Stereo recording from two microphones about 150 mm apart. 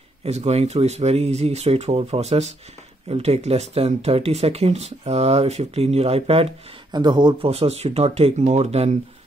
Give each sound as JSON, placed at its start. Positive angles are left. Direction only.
{"t": 0.2, "sound": "speech", "side_deg": -45}